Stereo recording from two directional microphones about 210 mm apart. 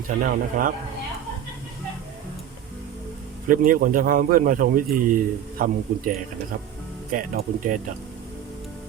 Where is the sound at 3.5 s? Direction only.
40° right (ahead or behind).